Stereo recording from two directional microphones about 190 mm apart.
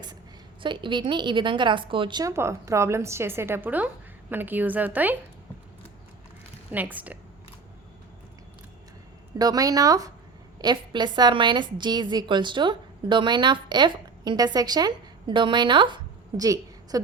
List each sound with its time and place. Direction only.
0.6 s a woman's voice: 25° right (ahead or behind); by 5.1 s 10° right (ahead or behind)
6.7 s a woman's voice: 10° right (ahead or behind)
9.4 s a woman's voice: 20° right (ahead or behind)
16.4 s a sound: 20° right (ahead or behind)